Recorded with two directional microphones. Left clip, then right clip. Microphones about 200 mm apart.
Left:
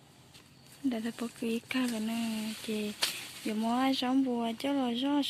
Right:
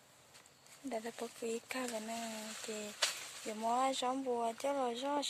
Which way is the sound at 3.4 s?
Centre (ahead or behind).